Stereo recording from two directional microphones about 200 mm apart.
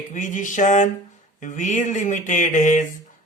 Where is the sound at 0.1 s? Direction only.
40° left (ahead or behind).